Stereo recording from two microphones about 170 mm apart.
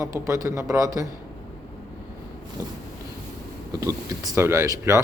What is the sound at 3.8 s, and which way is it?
A man's voice, 20° right (ahead or behind).